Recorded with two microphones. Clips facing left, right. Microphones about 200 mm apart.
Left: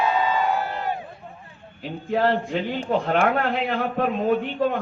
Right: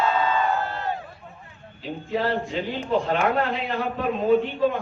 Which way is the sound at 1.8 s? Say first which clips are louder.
Left 3 dB; 55° left (ahead or behind).